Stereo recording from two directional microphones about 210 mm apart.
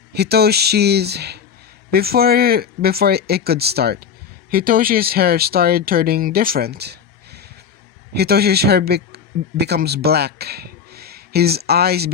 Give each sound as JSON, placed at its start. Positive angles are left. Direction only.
{"t": 0.1, "sound": "speech", "side_deg": -50}